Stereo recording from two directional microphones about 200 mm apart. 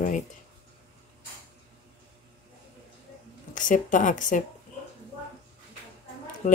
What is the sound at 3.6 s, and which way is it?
Speech, 40° left (ahead or behind).